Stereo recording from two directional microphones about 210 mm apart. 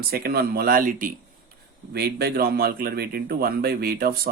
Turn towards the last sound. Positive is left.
turn(degrees=-45)  # may be behind; listen again after turning